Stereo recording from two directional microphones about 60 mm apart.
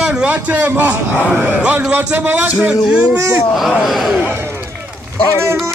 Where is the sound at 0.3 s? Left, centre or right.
Right.